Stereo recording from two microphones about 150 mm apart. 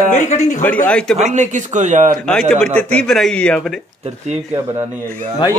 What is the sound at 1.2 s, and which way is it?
Speech, 50° right (ahead or behind).